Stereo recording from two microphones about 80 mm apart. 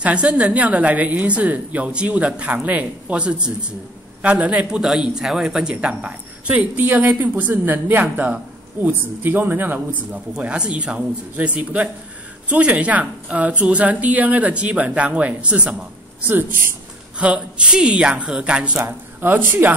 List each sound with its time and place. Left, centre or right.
0.0 s a man's voice: centre
10.3 s a man's voice: centre
16.3 s speech: right
17.2 s a man's voice: centre
18.9 s speech: right